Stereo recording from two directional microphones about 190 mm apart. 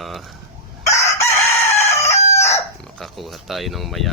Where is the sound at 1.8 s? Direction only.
35° left (ahead or behind).